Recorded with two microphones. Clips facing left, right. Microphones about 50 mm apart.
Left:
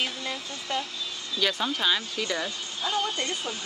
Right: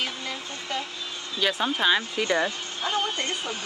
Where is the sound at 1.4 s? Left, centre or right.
Centre.